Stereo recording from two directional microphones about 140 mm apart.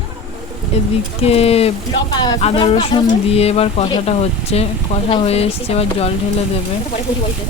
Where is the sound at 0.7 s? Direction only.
45° left (ahead or behind).